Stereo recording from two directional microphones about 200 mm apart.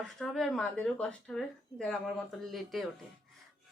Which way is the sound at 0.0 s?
Centre (ahead or behind).